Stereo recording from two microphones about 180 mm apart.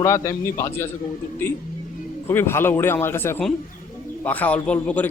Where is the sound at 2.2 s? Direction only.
15° left (ahead or behind).